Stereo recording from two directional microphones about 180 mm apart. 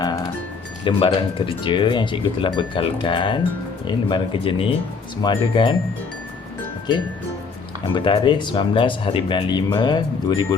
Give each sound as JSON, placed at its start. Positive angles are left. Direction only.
{"t": 0.9, "sound": "speech", "side_deg": 30}
{"t": 7.9, "sound": "speech", "side_deg": 25}